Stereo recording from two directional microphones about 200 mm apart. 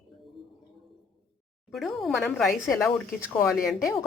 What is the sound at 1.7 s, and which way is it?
A woman's voice, centre (ahead or behind).